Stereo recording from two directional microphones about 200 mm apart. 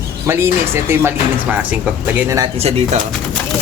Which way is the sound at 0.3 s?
10° right (ahead or behind).